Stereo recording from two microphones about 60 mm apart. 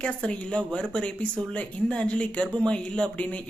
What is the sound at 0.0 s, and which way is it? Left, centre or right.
Speech, centre.